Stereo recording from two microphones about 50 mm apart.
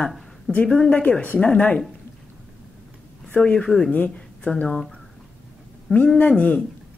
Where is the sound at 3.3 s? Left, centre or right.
Centre.